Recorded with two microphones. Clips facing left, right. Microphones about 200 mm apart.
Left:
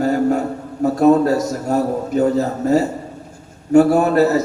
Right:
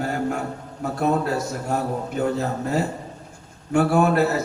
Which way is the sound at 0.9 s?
40° left (ahead or behind).